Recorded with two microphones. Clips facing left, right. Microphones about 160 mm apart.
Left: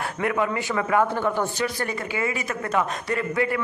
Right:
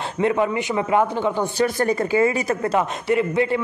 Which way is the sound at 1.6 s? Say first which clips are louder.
Right 7 dB; 40° right (ahead or behind).